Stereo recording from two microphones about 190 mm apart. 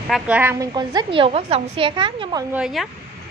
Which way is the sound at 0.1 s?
10° right (ahead or behind).